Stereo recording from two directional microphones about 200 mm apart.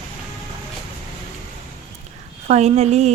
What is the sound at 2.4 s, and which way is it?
Speech, 35° right (ahead or behind).